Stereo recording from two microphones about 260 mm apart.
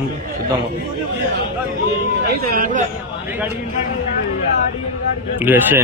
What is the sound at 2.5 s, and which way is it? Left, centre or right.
Speech, right.